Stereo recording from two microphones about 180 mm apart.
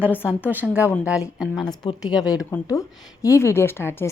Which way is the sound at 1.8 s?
25° left (ahead or behind).